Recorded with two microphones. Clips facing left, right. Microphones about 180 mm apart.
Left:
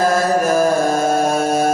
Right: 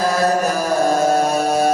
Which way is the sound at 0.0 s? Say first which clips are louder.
Left 2 dB; 50° left (ahead or behind).